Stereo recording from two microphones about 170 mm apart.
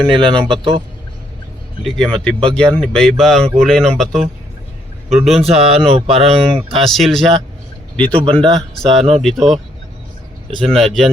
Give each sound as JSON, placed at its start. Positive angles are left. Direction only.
{"t": 0.1, "sound": "speech", "side_deg": -30}
{"t": 1.8, "sound": "speech", "side_deg": 0}
{"t": 5.3, "sound": "speech", "side_deg": -35}
{"t": 6.7, "sound": "speech", "side_deg": 0}
{"t": 7.9, "sound": "speech", "side_deg": -30}
{"t": 9.2, "sound": "speech", "side_deg": 0}
{"t": 10.6, "sound": "speech", "side_deg": 0}